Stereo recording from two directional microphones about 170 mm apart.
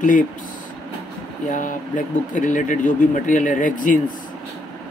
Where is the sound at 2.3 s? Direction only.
50° left (ahead or behind).